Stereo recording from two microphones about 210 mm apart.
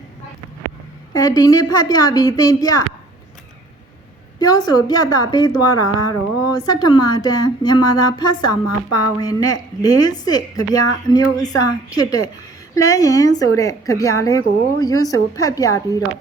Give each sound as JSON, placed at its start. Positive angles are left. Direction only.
{"t": 1.1, "sound": "a woman's voice", "side_deg": 15}
{"t": 4.4, "sound": "a woman's voice", "side_deg": 20}
{"t": 12.7, "sound": "a woman's voice", "side_deg": 15}